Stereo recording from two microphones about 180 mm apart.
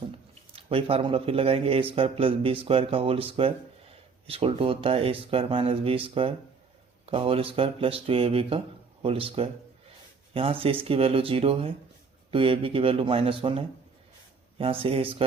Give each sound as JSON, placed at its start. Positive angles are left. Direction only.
{"t": 0.5, "sound": "speech", "side_deg": -35}